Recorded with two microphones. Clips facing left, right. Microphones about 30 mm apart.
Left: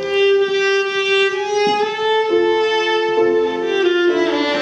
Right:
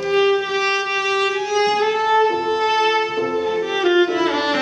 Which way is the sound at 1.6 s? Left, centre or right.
Centre.